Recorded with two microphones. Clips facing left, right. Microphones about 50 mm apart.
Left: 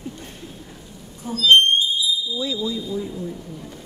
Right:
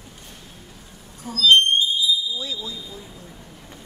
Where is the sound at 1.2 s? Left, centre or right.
Left.